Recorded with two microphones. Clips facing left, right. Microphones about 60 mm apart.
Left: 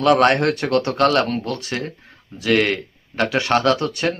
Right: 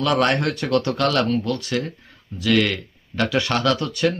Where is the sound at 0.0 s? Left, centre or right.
Left.